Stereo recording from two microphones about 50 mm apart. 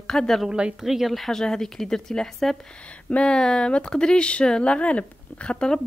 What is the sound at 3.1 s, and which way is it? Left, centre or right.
A woman's voice, left.